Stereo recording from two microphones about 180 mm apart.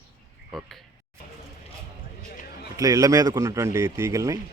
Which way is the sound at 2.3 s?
65° left (ahead or behind).